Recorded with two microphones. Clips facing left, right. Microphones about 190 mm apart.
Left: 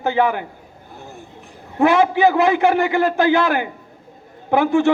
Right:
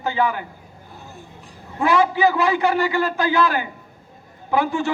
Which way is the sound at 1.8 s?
55° left (ahead or behind).